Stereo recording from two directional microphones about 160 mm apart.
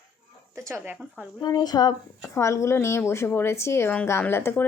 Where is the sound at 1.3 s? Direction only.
25° left (ahead or behind).